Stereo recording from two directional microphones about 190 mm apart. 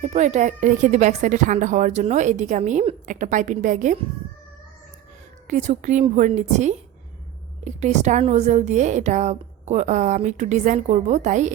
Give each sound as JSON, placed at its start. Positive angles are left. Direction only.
{"t": 0.0, "sound": "speech", "side_deg": -35}
{"t": 5.5, "sound": "speech", "side_deg": -40}